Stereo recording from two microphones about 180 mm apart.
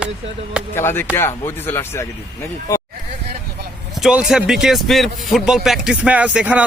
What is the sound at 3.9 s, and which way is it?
A man's voice, 5° right (ahead or behind).